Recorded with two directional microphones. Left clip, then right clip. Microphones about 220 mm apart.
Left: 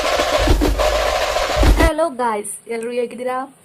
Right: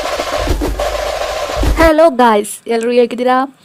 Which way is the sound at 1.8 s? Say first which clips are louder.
Right 10 dB; 30° right (ahead or behind).